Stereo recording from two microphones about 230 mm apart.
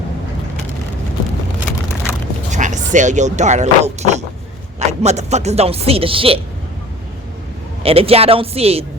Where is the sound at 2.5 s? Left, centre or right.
Right.